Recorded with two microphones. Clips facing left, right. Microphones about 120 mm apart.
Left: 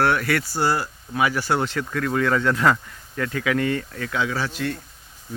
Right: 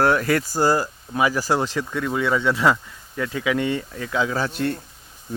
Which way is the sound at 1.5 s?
20° right (ahead or behind).